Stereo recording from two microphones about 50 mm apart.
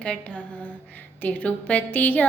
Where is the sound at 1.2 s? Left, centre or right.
Left.